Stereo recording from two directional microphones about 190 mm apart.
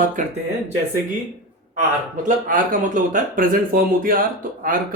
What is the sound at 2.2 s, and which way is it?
Speech, 45° right (ahead or behind).